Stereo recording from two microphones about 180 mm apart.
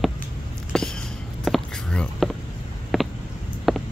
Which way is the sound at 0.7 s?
5° left (ahead or behind).